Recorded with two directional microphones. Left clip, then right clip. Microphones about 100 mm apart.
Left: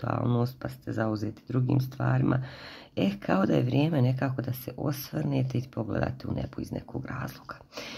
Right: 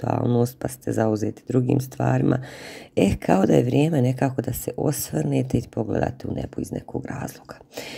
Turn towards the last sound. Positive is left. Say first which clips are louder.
# right 6 dB
turn(degrees=-45)  # may be behind; listen again after turning